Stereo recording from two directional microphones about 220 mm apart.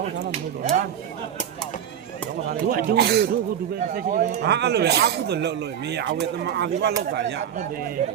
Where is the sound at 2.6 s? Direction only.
45° right (ahead or behind).